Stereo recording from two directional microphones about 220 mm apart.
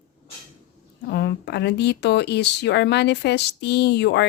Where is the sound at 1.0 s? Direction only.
50° left (ahead or behind).